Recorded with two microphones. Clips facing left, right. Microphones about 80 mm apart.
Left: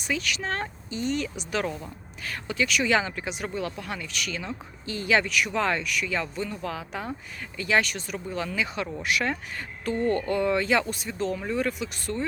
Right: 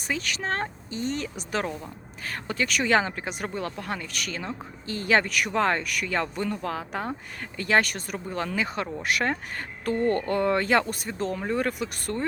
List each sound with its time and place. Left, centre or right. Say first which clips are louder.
0.1 s speech: even; right